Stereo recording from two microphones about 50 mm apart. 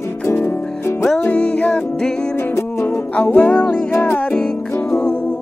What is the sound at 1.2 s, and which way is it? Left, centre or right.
Music, left.